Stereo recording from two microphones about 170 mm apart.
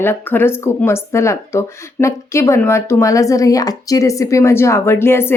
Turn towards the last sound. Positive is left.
turn(degrees=15)  # may be behind; listen again after turning